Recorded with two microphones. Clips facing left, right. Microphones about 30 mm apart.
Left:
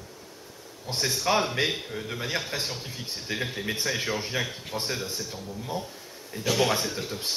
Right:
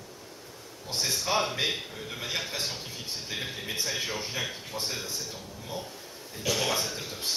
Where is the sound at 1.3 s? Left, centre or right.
Left.